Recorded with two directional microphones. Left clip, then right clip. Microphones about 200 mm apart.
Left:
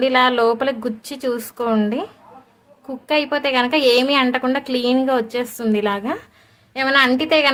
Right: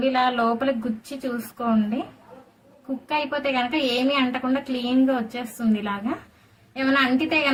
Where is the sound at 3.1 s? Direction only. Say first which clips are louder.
Left 6 dB; 60° left (ahead or behind).